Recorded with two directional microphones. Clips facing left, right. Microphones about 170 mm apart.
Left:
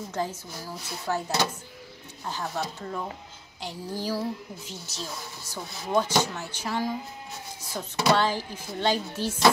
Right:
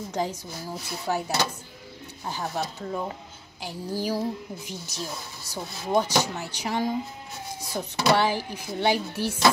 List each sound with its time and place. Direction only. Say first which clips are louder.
0.1 s speech: right 3 dB; 15° right (ahead or behind)